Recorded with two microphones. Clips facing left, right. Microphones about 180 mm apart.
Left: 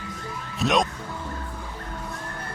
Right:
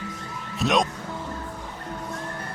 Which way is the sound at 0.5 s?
Centre (ahead or behind).